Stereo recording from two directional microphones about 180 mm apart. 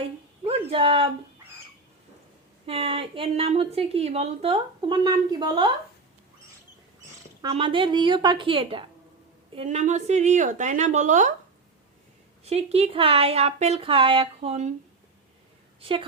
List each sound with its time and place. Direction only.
0.0 s a sound: 30° right (ahead or behind)
2.6 s a woman's voice: 30° right (ahead or behind)
7.5 s a woman's voice: 30° right (ahead or behind)
9.6 s speech: 40° right (ahead or behind)
12.5 s a woman's voice: 35° right (ahead or behind)
15.8 s a woman's voice: 30° right (ahead or behind)